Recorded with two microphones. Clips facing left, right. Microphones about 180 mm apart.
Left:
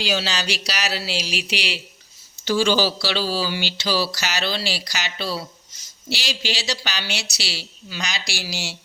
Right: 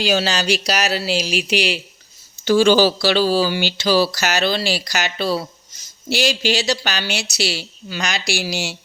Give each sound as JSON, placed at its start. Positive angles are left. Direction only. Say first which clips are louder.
{"t": 0.0, "sound": "speech", "louder": "right 6 dB", "side_deg": -50}